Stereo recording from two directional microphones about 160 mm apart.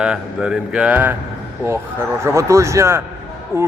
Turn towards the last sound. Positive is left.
turn(degrees=-15)  # may be behind; listen again after turning